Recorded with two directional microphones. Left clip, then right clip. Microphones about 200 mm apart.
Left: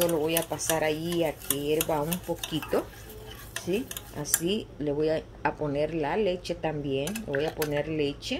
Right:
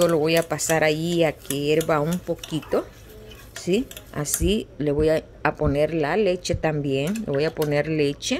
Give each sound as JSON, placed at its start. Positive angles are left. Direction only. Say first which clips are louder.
{"t": 0.1, "sound": "speech", "louder": "right 7 dB", "side_deg": -40}
{"t": 2.3, "sound": "speech", "louder": "right 5 dB", "side_deg": -25}
{"t": 3.6, "sound": "speech", "louder": "right 7 dB", "side_deg": -35}